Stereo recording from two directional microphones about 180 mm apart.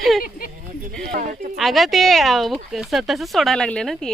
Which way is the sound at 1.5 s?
Centre (ahead or behind).